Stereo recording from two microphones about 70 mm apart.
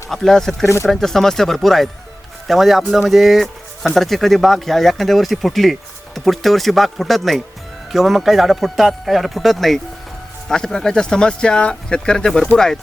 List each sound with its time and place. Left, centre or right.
0.1 s speech: centre
0.6 s speech: left
0.9 s speech: centre